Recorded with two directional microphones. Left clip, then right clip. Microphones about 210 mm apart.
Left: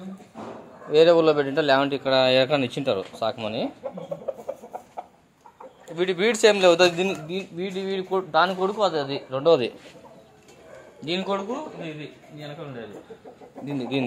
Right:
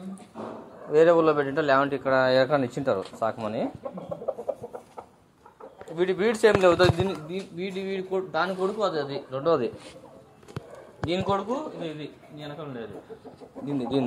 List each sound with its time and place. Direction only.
0.9 s a man's voice: 15° left (ahead or behind)
2.5 s a man's voice: 10° left (ahead or behind)
5.9 s a man's voice: 15° left (ahead or behind)
11.1 s a man's voice: 5° right (ahead or behind)